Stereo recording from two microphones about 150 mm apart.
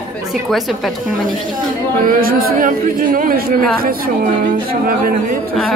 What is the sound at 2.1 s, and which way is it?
Speech, 75° right (ahead or behind).